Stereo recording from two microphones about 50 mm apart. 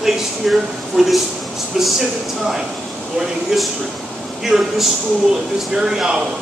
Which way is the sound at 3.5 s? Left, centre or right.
Centre.